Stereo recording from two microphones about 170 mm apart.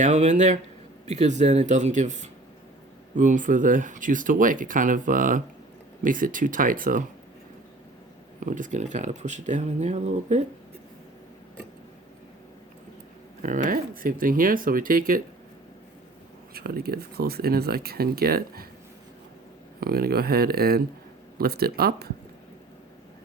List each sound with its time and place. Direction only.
0.0 s speech: 40° right (ahead or behind)
8.4 s speech: 50° right (ahead or behind)
13.4 s speech: 50° right (ahead or behind)
16.6 s speech: 65° right (ahead or behind)
19.8 s speech: 65° right (ahead or behind)